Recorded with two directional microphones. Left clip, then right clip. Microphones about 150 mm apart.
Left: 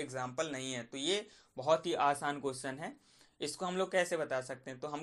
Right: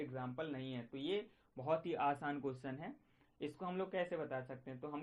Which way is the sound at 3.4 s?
35° left (ahead or behind).